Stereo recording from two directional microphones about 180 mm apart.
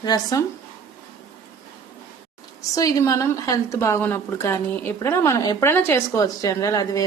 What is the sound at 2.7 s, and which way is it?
A woman's voice, 20° left (ahead or behind).